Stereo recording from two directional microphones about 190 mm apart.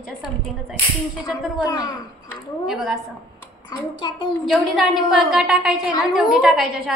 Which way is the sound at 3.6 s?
20° left (ahead or behind).